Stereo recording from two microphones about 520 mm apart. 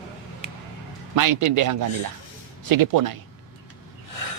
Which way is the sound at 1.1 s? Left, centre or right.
Right.